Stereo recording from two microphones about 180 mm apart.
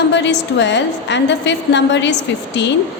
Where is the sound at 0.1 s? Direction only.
80° left.